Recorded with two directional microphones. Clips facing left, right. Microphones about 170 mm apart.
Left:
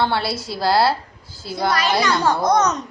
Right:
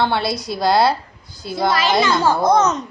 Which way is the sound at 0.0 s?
20° right (ahead or behind).